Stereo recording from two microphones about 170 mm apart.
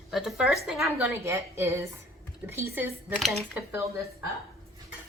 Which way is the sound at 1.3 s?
15° right (ahead or behind).